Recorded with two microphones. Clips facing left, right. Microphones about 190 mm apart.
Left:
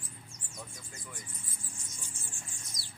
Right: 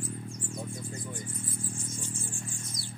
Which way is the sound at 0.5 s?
30° right (ahead or behind).